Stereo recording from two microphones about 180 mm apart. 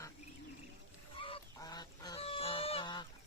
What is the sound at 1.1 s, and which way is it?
Goose, 30° left (ahead or behind).